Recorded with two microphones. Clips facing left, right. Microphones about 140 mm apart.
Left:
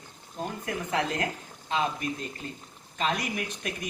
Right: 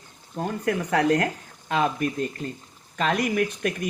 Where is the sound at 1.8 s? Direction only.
50° right (ahead or behind).